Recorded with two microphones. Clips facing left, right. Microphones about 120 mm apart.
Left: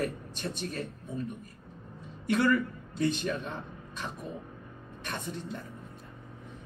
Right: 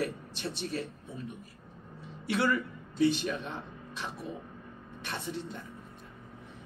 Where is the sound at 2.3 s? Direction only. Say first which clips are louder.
Left 3 dB; 50° left (ahead or behind).